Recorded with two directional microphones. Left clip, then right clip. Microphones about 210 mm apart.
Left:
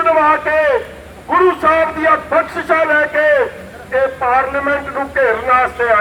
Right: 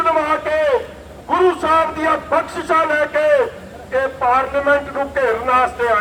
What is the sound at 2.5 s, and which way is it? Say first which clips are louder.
Speech: left 2 dB; 55° right (ahead or behind).